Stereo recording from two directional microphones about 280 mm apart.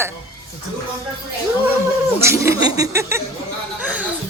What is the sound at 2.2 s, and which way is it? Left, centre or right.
A woman's voice, centre.